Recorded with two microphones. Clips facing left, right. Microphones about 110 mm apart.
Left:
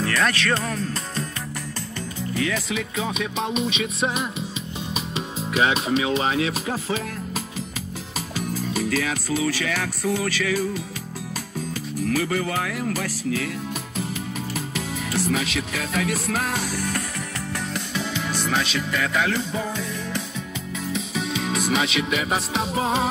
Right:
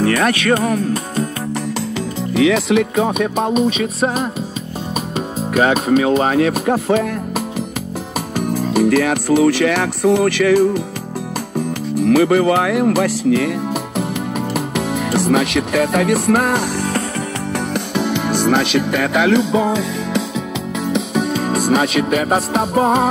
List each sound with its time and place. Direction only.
0.0 s music: 55° right (ahead or behind)
2.3 s music: 80° right; by 4.3 s 40° right (ahead or behind)
5.1 s speech: 45° right (ahead or behind)
11.5 s music: 65° right (ahead or behind)
12.9 s speech: 65° right (ahead or behind)
14.5 s music: 65° right (ahead or behind); by 20.2 s 90° right
20.9 s music: 55° right (ahead or behind)